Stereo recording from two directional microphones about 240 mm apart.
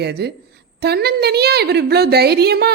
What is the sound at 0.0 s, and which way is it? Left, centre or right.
A woman's voice, right.